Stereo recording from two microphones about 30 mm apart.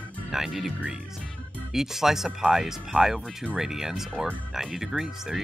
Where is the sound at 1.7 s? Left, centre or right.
Centre.